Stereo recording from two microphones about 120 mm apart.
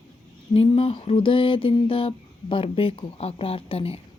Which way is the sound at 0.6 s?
55° left (ahead or behind).